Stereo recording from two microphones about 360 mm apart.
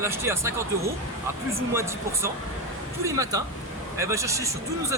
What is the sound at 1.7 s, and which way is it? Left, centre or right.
Speech, centre.